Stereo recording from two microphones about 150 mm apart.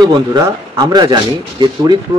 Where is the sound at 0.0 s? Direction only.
30° right (ahead or behind).